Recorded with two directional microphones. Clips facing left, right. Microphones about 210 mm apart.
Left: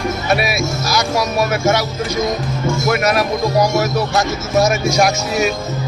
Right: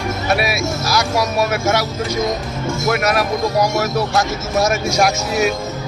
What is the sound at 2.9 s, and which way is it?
Speech, centre (ahead or behind).